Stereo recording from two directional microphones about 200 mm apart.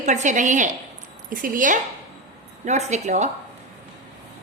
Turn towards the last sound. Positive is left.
turn(degrees=-35)  # may be behind; listen again after turning